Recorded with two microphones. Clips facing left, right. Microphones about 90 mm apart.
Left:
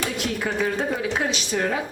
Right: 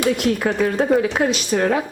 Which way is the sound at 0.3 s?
55° right (ahead or behind).